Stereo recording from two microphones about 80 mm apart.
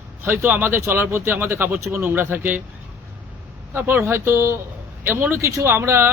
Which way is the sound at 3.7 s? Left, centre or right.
Right.